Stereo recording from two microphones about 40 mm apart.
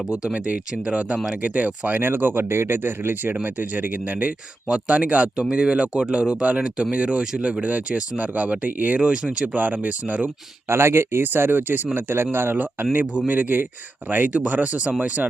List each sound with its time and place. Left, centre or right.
0.3 s speech: right
2.0 s speech: right
3.4 s speech: right
10.7 s speech: right
12.5 s speech: right